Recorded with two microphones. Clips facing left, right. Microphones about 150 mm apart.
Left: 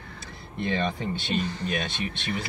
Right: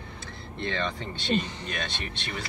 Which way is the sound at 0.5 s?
10° left (ahead or behind).